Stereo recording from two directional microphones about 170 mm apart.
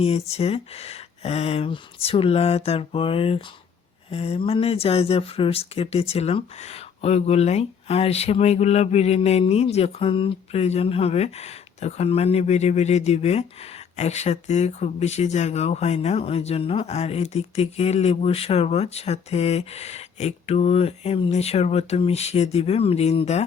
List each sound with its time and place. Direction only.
0.0 s speech: 35° left (ahead or behind)